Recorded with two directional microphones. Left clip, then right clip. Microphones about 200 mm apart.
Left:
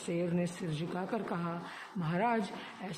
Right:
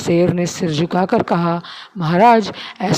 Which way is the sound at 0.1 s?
45° right (ahead or behind).